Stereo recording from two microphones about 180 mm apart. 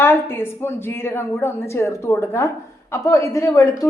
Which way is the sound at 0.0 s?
10° left (ahead or behind).